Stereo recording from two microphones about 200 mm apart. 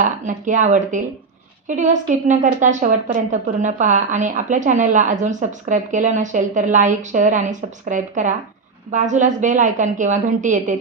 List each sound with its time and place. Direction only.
0.0 s a woman's voice: 40° right (ahead or behind)